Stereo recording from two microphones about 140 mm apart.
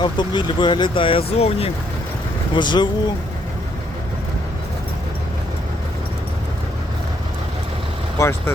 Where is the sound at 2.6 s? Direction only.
35° left (ahead or behind).